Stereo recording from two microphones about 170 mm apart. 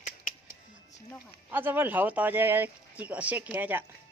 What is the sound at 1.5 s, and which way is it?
Speech, 10° right (ahead or behind).